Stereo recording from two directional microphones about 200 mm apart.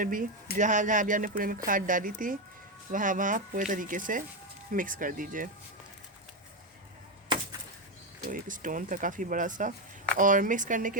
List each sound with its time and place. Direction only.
0.0 s speech: 45° right (ahead or behind)
8.3 s speech: 40° right (ahead or behind)